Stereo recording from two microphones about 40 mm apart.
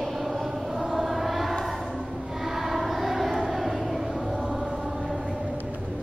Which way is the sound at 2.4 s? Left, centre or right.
Centre.